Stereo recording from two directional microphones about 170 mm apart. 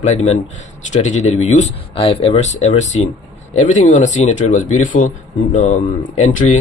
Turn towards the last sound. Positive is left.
turn(degrees=45)  # may be behind; listen again after turning